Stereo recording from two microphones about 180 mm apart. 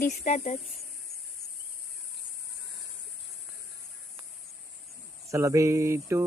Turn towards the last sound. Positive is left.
turn(degrees=-15)  # may be behind; listen again after turning